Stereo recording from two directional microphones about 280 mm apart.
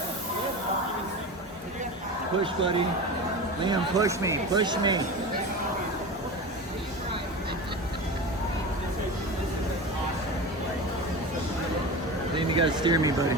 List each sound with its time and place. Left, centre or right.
2.4 s speech: centre
12.4 s speech: centre